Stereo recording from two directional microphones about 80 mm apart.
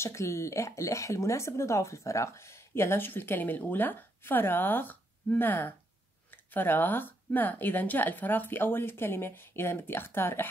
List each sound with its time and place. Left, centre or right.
0.0 s speech: left